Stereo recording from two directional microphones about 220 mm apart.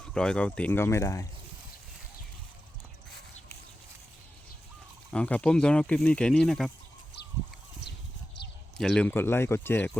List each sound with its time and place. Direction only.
0.0 s speech: 5° left (ahead or behind)
5.1 s speech: 5° left (ahead or behind)
8.8 s speech: 5° left (ahead or behind)